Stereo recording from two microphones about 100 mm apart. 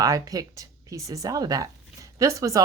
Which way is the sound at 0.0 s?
35° right (ahead or behind).